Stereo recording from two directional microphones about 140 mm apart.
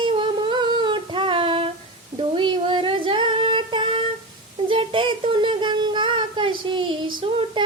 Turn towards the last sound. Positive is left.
turn(degrees=-35)  # may be behind; listen again after turning